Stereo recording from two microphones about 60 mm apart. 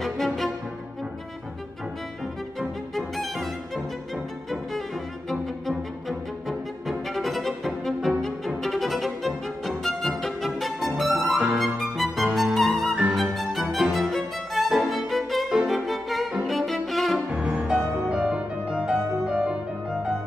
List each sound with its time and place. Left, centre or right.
0.0 s music: centre
3.0 s music: centre
5.3 s music: centre
17.3 s music: centre